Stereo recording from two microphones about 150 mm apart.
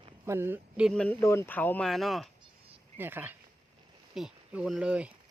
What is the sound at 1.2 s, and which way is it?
Speech, 15° left (ahead or behind).